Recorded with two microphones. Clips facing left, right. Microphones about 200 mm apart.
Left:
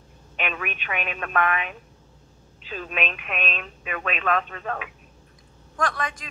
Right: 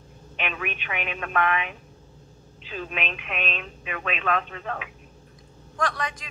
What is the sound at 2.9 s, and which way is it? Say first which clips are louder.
A woman's voice: left 6 dB; 45° left (ahead or behind).